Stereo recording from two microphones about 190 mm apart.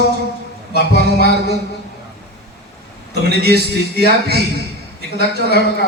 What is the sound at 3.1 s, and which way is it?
A man's voice, 55° right (ahead or behind).